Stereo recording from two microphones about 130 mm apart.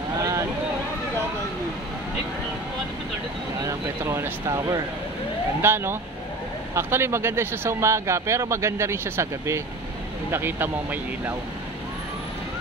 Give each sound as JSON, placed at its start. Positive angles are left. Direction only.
{"t": 0.2, "sound": "boat", "side_deg": -25}
{"t": 3.6, "sound": "speech", "side_deg": -20}